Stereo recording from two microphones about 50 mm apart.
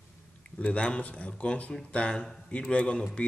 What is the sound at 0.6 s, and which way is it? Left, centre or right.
A man's voice, left.